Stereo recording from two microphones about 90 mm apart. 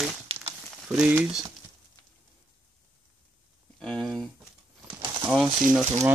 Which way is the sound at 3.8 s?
5° left (ahead or behind).